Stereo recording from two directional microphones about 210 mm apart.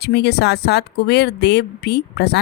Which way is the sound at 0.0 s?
50° left (ahead or behind).